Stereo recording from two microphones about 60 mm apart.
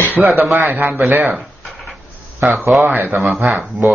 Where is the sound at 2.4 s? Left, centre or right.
Right.